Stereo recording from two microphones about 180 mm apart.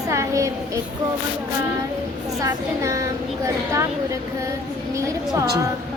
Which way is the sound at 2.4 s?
20° right (ahead or behind).